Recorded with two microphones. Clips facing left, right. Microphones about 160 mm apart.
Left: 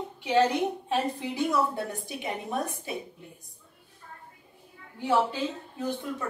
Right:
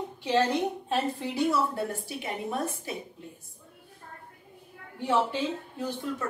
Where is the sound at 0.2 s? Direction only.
10° left (ahead or behind).